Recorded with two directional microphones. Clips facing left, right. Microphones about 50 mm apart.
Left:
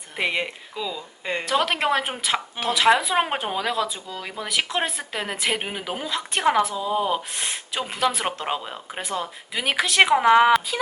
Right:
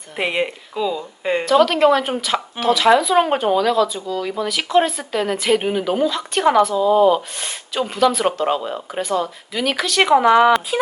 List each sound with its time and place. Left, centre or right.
0.2 s speech: centre
1.5 s a woman's voice: left; by 6.1 s centre
6.1 s a woman's voice: left
6.7 s speech: centre
7.3 s a woman's voice: centre
8.4 s speech: centre
9.0 s a woman's voice: centre
10.0 s speech: centre